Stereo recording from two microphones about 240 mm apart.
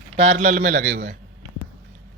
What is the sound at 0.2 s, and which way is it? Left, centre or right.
Speech, right.